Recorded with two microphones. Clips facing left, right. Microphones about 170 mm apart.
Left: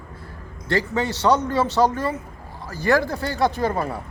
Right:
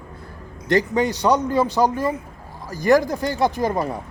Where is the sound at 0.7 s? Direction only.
20° right (ahead or behind).